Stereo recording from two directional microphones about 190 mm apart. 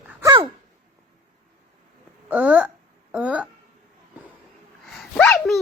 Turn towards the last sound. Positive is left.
turn(degrees=5)  # may be behind; listen again after turning